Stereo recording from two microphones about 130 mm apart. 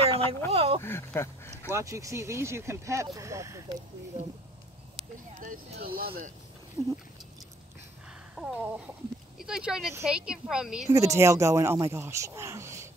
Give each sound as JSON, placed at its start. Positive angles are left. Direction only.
{"t": 0.0, "sound": "a sound", "side_deg": -50}
{"t": 0.5, "sound": "speech", "side_deg": -50}
{"t": 0.8, "sound": "speech", "side_deg": 20}
{"t": 1.7, "sound": "speech", "side_deg": -25}
{"t": 4.1, "sound": "speech", "side_deg": -50}
{"t": 6.8, "sound": "speech", "side_deg": -20}
{"t": 8.4, "sound": "a sound", "side_deg": -10}
{"t": 9.4, "sound": "speech", "side_deg": -5}
{"t": 10.9, "sound": "speech", "side_deg": -25}